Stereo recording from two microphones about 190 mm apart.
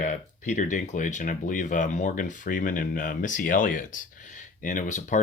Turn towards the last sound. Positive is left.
turn(degrees=40)  # may be behind; listen again after turning